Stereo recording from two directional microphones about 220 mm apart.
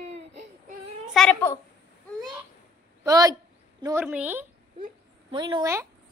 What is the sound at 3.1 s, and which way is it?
Speech, 15° right (ahead or behind).